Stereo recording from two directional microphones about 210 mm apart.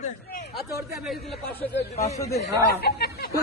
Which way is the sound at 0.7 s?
5° right (ahead or behind).